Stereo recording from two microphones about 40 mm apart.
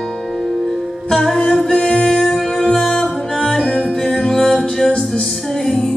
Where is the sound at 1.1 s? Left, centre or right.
Centre.